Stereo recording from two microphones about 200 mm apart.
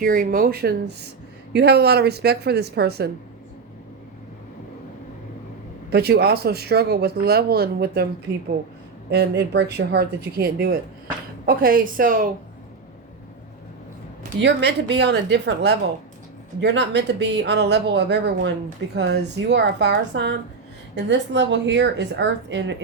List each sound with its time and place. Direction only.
0.0 s speech: 45° right (ahead or behind)
5.9 s speech: 50° right (ahead or behind)
9.0 s speech: 55° right (ahead or behind)
14.4 s speech: 60° right (ahead or behind)